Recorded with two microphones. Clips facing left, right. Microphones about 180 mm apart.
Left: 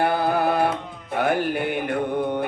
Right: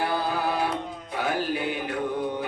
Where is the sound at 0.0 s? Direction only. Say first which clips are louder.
Left 6 dB; 55° left (ahead or behind).